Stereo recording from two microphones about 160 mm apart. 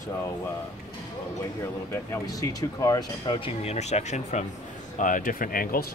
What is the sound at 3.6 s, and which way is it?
Speech, 45° left (ahead or behind).